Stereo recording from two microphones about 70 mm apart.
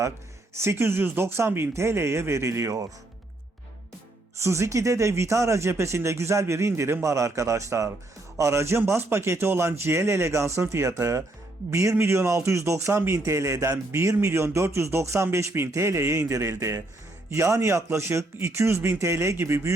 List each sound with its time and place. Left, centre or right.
0.5 s a man's voice: right
4.4 s a man's voice: right